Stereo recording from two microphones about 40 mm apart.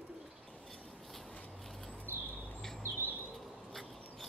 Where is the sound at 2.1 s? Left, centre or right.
Right.